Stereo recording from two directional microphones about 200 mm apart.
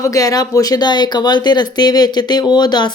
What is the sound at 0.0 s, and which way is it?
Speech, 15° left (ahead or behind).